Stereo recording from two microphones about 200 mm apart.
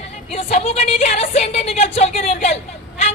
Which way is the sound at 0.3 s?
30° left (ahead or behind).